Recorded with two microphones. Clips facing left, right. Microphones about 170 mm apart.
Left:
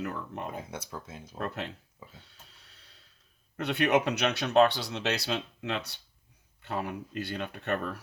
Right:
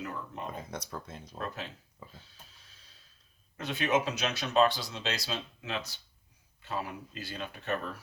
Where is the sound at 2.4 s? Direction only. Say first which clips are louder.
Left 2 dB; 65° left (ahead or behind).